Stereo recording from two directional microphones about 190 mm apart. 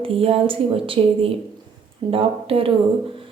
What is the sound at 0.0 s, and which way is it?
Speech, 30° right (ahead or behind).